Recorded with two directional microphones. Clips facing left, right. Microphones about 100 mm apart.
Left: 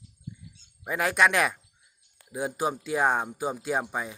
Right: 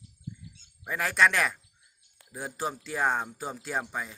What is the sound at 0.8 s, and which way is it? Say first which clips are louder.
Speech: left 2 dB; 15° left (ahead or behind).